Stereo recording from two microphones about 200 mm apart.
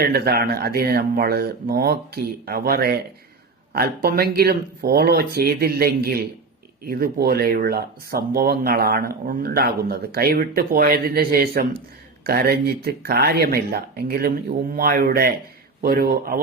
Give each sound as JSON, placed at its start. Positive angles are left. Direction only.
{"t": 0.0, "sound": "speech", "side_deg": -50}